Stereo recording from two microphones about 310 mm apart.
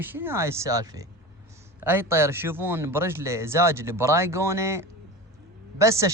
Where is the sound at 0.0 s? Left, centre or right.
Centre.